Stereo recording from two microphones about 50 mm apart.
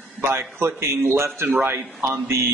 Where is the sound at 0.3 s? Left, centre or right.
Right.